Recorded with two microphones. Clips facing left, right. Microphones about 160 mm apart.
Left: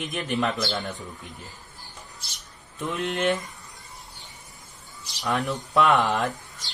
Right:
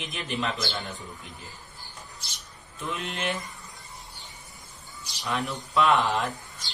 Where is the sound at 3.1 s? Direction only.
50° left (ahead or behind).